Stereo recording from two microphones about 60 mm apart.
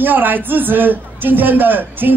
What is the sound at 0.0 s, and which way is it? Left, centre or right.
A man's voice, right.